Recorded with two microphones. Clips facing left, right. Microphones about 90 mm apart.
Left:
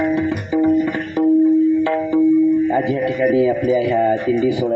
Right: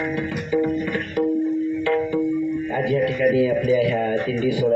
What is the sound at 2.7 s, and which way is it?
Speech, 25° left (ahead or behind).